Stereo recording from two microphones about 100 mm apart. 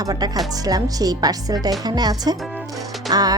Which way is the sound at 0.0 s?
40° right (ahead or behind).